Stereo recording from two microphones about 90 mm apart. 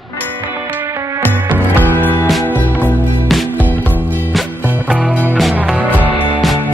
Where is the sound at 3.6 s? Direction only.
20° left (ahead or behind).